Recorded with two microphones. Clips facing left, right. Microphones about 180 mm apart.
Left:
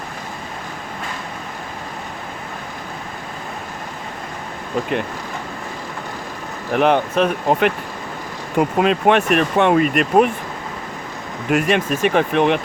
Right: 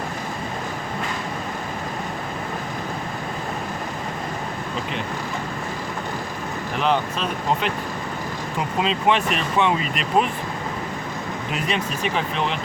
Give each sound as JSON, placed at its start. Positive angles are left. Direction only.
{"t": 6.7, "sound": "speech", "side_deg": 60}
{"t": 11.5, "sound": "speech", "side_deg": 50}